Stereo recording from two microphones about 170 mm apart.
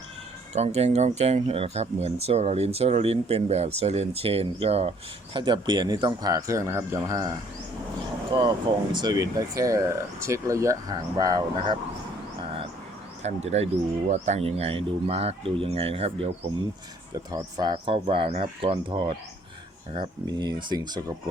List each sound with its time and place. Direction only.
0.5 s speech: 40° right (ahead or behind)
13.2 s speech: 40° right (ahead or behind)
17.3 s speech: 25° right (ahead or behind)